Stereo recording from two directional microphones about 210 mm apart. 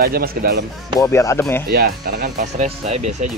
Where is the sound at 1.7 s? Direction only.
45° right (ahead or behind).